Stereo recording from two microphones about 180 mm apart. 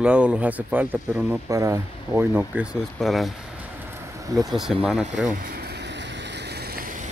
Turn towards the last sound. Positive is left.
turn(degrees=-50)  # may be behind; listen again after turning